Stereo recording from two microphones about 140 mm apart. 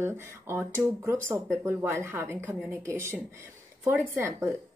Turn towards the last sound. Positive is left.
turn(degrees=-20)  # may be behind; listen again after turning